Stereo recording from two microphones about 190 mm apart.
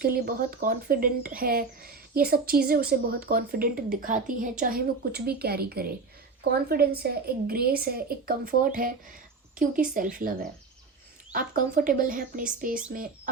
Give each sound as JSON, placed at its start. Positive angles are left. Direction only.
{"t": 0.0, "sound": "a woman's voice", "side_deg": -50}